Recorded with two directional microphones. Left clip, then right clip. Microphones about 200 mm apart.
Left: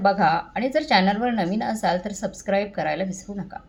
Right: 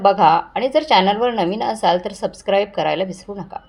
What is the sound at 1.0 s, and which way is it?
Speech, 90° right.